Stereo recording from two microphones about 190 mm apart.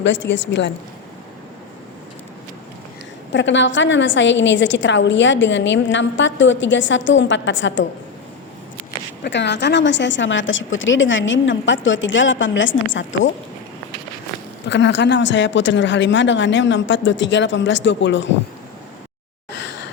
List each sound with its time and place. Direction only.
0.0 s a woman's voice: 70° left (ahead or behind)
3.3 s a woman's voice: 70° left (ahead or behind)
9.2 s a woman's voice: 65° left (ahead or behind)
14.7 s a woman's voice: 70° left (ahead or behind)